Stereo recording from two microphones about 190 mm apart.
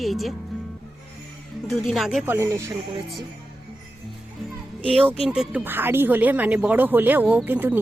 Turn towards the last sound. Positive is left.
turn(degrees=-10)  # may be behind; listen again after turning